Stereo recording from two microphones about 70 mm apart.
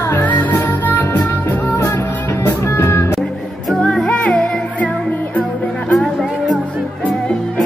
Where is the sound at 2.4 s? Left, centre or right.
Left.